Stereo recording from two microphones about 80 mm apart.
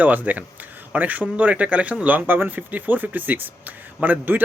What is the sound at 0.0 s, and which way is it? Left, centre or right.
Speech, right.